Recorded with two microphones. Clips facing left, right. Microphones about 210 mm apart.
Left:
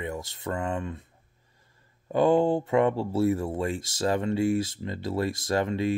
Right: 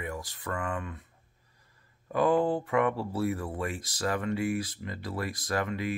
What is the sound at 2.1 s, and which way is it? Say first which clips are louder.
Speech: left 4 dB; 25° left (ahead or behind).